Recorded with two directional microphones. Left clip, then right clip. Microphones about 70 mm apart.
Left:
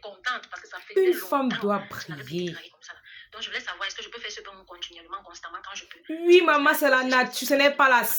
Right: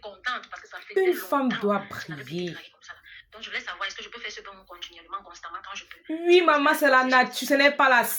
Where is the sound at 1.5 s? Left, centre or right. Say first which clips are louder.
Right 1 dB; left.